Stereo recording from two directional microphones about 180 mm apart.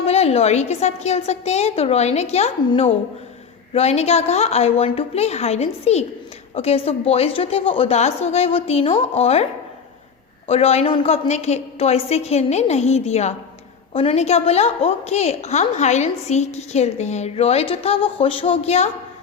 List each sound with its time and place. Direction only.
0.0 s a woman's voice: 35° left (ahead or behind)